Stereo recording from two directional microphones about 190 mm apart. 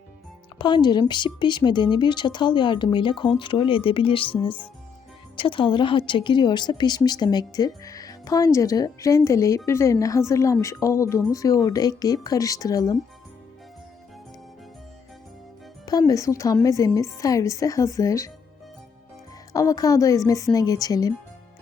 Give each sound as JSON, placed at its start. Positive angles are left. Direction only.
{"t": 0.6, "sound": "a woman's voice", "side_deg": 25}
{"t": 15.9, "sound": "speech", "side_deg": 20}
{"t": 19.5, "sound": "a woman's voice", "side_deg": 20}